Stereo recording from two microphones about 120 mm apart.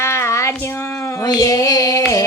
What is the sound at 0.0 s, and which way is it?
Child singing, 20° left (ahead or behind).